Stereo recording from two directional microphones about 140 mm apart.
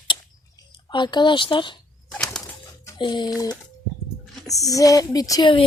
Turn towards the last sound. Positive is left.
turn(degrees=30)  # may be behind; listen again after turning